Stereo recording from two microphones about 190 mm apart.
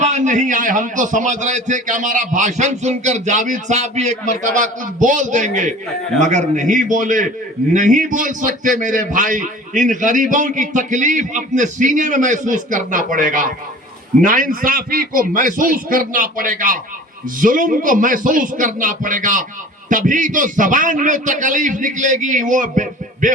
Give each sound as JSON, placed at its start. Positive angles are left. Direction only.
{"t": 0.0, "sound": "a man's voice", "side_deg": -40}